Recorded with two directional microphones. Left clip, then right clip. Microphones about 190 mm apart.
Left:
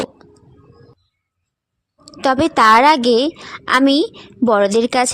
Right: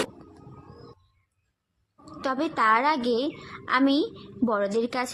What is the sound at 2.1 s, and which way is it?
A woman's voice, 45° left (ahead or behind).